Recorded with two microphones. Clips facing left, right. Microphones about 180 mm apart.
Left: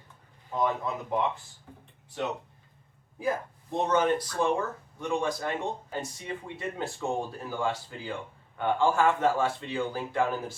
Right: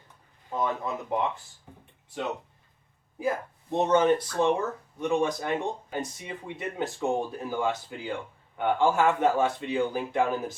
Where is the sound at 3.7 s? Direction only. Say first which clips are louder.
Right 3 dB; 25° right (ahead or behind).